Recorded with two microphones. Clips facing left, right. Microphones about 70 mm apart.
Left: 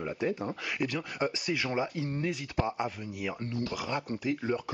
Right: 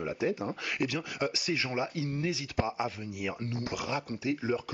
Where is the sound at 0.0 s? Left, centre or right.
Centre.